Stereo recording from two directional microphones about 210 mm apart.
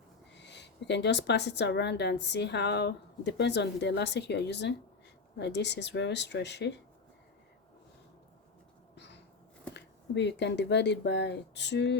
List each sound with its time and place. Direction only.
0.3 s a woman's voice: 55° left (ahead or behind)
9.0 s a sound: 55° left (ahead or behind)
9.7 s a woman's voice: 55° left (ahead or behind)